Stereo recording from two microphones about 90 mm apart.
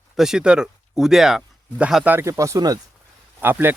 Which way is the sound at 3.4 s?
25° right (ahead or behind).